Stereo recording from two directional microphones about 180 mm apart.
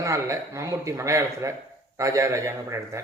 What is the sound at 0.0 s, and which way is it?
A man's voice, 15° right (ahead or behind).